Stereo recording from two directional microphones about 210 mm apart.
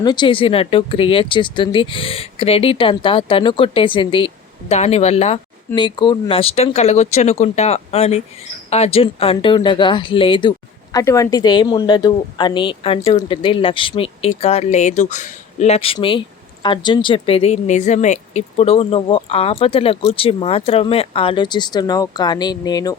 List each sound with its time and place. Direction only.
0.0 s speech: 20° left (ahead or behind)